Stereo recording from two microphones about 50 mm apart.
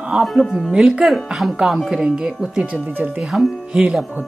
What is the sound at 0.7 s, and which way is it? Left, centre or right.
Speech, centre.